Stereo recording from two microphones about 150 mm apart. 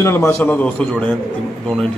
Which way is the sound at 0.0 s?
20° left (ahead or behind).